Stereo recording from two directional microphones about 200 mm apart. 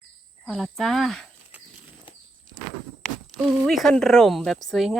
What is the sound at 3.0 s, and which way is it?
Speech, centre (ahead or behind).